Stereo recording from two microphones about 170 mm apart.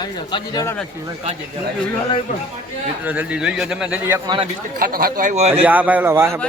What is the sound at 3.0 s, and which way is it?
A man's voice, 10° right (ahead or behind).